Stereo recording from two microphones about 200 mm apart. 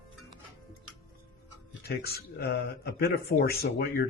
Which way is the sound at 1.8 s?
50° left (ahead or behind).